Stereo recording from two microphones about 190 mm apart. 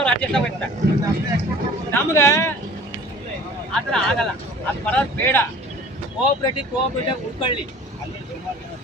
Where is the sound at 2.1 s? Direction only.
15° left (ahead or behind).